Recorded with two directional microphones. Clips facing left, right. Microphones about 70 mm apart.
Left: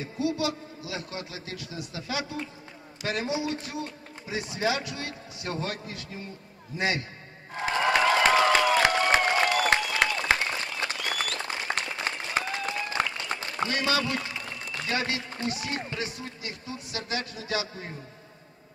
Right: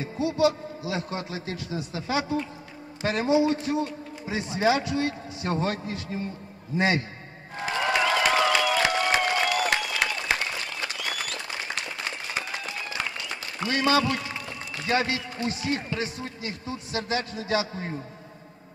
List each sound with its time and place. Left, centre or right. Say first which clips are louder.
0.0 s a man's voice: right 5 dB; right
7.6 s crowd: left 1 dB; left
8.2 s a sound: left 1 dB; left
9.8 s applause: left 2 dB; left
13.7 s a man's voice: right 6 dB; right